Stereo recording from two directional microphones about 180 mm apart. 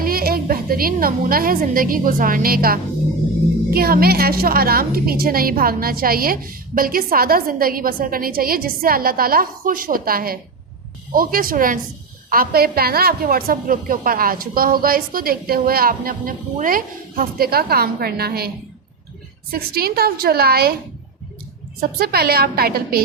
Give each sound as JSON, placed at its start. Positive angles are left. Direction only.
{"t": 0.0, "sound": "a woman's voice", "side_deg": -55}
{"t": 21.8, "sound": "a woman's voice", "side_deg": -55}